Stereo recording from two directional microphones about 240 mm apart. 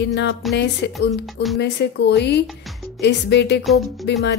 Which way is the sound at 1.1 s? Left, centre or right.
Centre.